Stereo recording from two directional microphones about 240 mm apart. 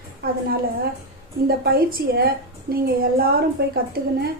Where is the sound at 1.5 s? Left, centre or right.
Right.